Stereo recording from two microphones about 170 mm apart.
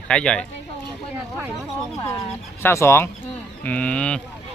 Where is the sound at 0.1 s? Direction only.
5° left (ahead or behind).